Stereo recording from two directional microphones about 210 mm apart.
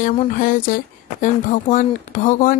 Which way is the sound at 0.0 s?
40° left (ahead or behind).